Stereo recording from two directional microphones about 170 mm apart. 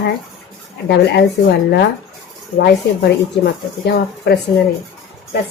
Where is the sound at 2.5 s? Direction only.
70° left (ahead or behind).